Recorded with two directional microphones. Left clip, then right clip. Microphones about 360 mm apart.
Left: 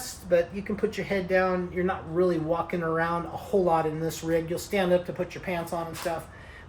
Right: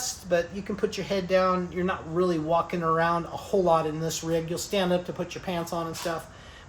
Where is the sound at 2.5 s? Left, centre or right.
Centre.